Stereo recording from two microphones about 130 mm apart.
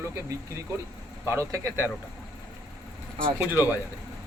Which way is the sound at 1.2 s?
20° right (ahead or behind).